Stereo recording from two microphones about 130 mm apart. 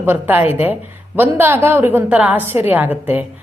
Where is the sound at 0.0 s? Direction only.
15° right (ahead or behind).